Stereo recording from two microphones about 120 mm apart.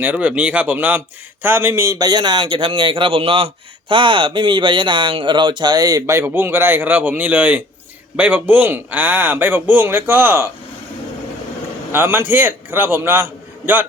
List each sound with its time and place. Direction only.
0.0 s speech: 10° right (ahead or behind)
2.0 s a man's voice: 40° right (ahead or behind); by 10.5 s 15° right (ahead or behind)
11.9 s a man's voice: 20° right (ahead or behind)